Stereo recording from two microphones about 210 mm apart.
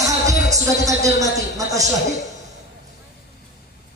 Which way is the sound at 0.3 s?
15° right (ahead or behind).